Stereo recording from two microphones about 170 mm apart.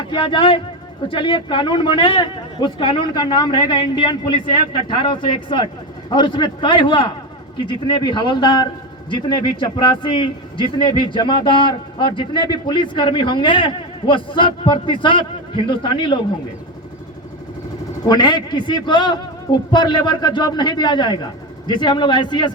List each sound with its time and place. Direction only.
0.1 s a man's voice: 30° left (ahead or behind)
18.0 s a man's voice: 25° left (ahead or behind)